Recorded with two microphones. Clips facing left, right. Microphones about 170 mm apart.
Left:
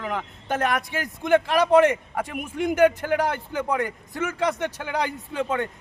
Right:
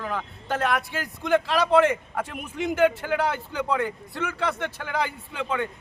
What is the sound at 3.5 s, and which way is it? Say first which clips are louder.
A man's voice: left 1 dB; 20° left (ahead or behind).